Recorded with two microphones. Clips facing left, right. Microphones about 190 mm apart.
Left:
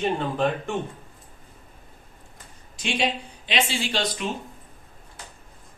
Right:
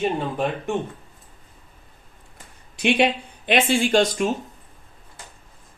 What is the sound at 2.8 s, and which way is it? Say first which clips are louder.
Speech: right 7 dB; 60° right (ahead or behind).